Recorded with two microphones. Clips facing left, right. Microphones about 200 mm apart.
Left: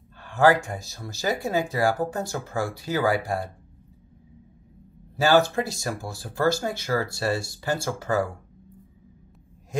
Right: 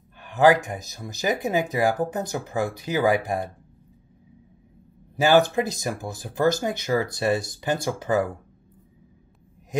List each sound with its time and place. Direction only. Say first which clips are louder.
0.2 s speech: right 2 dB; 20° right (ahead or behind)
5.1 s speech: right 2 dB; 20° right (ahead or behind)